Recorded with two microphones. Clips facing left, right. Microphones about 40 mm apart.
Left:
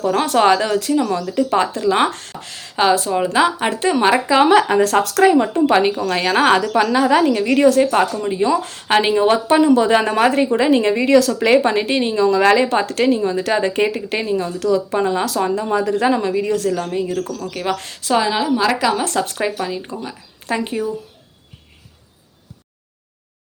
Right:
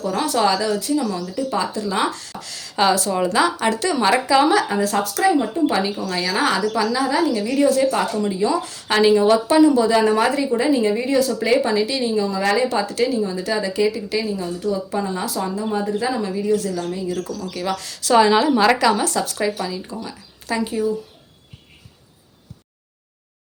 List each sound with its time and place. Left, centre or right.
0.0 s a woman's voice: left
4.4 s a woman's voice: left
7.8 s a woman's voice: left
11.4 s a woman's voice: left
16.0 s a woman's voice: left
17.5 s speech: left
18.1 s a woman's voice: centre
18.8 s speech: centre
19.0 s speech: left